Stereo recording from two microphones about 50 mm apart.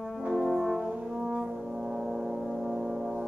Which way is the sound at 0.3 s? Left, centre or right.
Centre.